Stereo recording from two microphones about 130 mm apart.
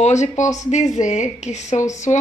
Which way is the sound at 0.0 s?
65° left (ahead or behind).